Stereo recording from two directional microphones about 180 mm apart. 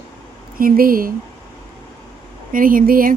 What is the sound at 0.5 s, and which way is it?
Speech, 50° right (ahead or behind).